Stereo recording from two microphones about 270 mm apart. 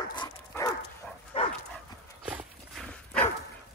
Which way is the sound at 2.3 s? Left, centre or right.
Centre.